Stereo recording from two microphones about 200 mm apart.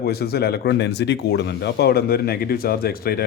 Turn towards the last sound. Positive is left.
turn(degrees=50)  # may be behind; listen again after turning